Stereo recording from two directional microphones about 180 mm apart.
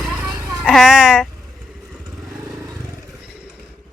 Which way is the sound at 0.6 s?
Centre (ahead or behind).